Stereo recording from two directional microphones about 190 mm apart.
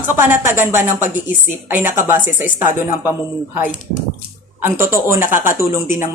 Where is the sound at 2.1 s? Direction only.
45° left (ahead or behind).